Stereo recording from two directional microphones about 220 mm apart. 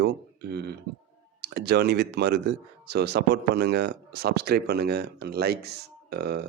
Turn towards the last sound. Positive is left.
turn(degrees=-45)  # may be behind; listen again after turning